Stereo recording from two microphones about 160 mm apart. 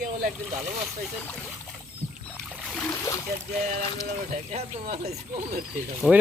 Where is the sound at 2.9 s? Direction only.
20° left (ahead or behind).